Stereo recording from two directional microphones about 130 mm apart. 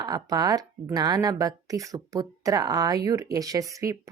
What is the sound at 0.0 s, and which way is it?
Speech, 30° right (ahead or behind).